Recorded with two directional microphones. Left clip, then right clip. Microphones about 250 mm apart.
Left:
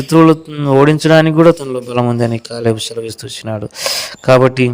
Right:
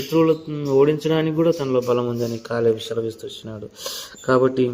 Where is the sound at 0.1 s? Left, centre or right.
Left.